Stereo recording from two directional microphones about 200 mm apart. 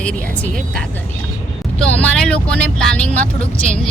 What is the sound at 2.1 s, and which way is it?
Speech, 5° left (ahead or behind).